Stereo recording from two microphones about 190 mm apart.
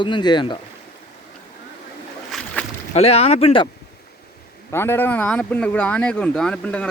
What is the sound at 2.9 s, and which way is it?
Speech, 35° left (ahead or behind).